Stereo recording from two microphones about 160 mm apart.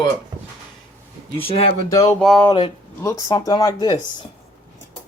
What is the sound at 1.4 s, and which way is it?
Speech, 40° left (ahead or behind).